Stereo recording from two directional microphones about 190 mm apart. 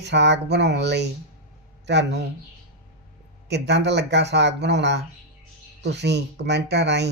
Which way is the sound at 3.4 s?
65° right (ahead or behind).